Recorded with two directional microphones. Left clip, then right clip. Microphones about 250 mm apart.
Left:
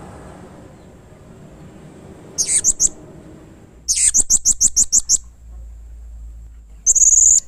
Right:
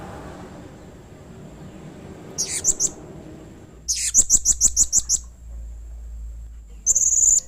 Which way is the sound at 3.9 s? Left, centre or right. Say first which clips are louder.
Left 3 dB; left.